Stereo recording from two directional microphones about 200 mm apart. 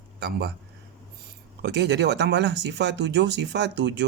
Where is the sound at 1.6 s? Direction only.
55° right (ahead or behind).